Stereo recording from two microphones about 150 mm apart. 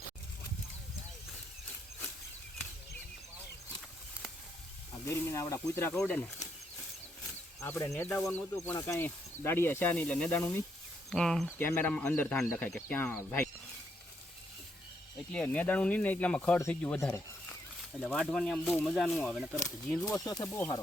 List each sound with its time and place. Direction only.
5.0 s speech: 20° left (ahead or behind)
7.6 s speech: 15° left (ahead or behind)
15.3 s speech: 5° left (ahead or behind)
18.0 s speech: 5° left (ahead or behind)